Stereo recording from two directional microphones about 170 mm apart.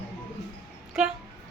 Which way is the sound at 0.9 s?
5° right (ahead or behind).